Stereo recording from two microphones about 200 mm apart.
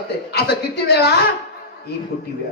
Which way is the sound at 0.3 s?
55° left (ahead or behind).